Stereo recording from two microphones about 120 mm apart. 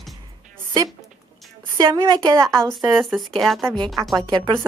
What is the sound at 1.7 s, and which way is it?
Speech, 35° right (ahead or behind).